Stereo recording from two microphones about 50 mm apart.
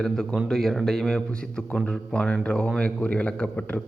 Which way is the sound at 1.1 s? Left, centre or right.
Centre.